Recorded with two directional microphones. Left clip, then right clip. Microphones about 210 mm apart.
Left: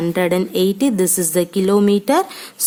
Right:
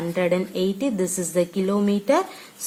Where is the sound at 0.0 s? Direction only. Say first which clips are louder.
Left 5 dB; 50° left (ahead or behind).